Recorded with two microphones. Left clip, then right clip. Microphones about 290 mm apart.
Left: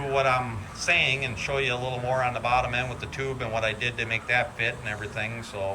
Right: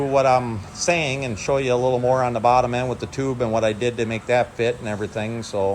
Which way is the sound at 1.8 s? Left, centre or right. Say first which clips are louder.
Right 10 dB; right.